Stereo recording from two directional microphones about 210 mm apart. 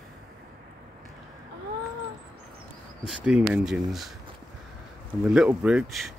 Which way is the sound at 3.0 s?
5° right (ahead or behind).